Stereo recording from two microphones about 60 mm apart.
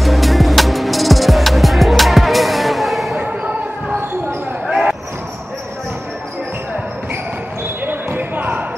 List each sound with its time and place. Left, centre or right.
0.0 s music: centre
4.6 s basketball bounce: centre
7.8 s basketball bounce: right